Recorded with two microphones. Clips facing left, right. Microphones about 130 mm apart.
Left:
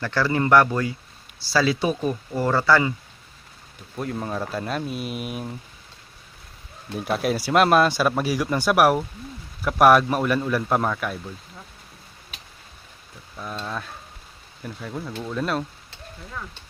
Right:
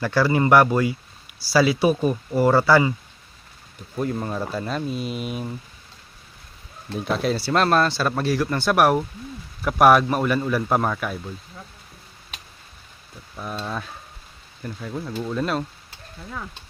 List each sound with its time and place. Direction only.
0.0 s speech: 15° right (ahead or behind)
3.9 s speech: centre (ahead or behind)
6.9 s speech: 10° left (ahead or behind)
13.4 s speech: 5° right (ahead or behind)